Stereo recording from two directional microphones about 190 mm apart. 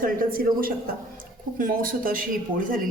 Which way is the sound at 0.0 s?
50° right (ahead or behind).